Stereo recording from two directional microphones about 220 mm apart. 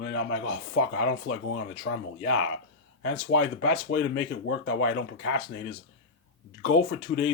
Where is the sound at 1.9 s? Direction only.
55° left (ahead or behind).